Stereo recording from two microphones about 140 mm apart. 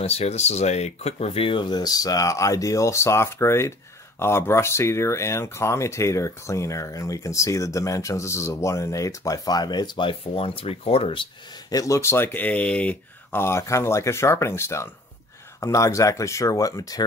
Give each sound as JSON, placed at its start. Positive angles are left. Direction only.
{"t": 0.0, "sound": "speech", "side_deg": 50}
{"t": 11.7, "sound": "speech", "side_deg": 25}